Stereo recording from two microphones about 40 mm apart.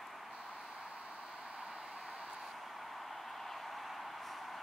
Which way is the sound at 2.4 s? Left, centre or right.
Centre.